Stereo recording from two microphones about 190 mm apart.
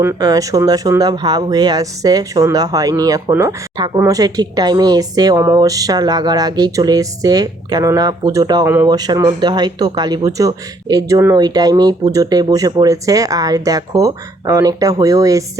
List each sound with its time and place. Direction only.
0.0 s speech: 15° right (ahead or behind)